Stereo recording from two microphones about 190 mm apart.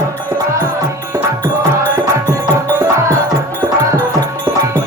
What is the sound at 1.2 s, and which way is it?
Music, 15° right (ahead or behind).